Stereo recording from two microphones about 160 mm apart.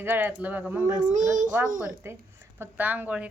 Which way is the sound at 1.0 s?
50° right (ahead or behind).